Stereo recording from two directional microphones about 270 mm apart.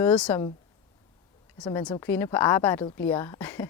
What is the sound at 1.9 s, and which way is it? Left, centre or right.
Speech, centre.